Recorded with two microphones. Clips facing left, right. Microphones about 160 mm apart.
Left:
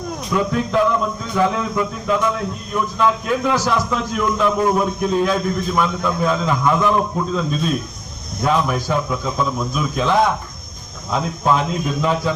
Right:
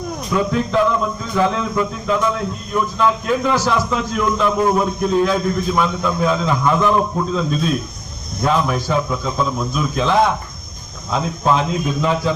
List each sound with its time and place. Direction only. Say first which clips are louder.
0.3 s a man's voice: right 1 dB; centre (ahead or behind)